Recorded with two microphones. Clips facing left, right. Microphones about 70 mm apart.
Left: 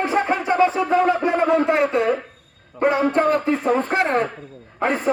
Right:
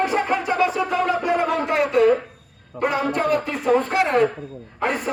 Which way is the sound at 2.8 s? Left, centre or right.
Left.